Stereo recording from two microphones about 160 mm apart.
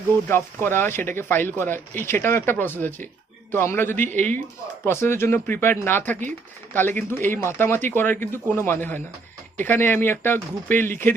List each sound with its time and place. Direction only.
0.3 s speech: 15° left (ahead or behind)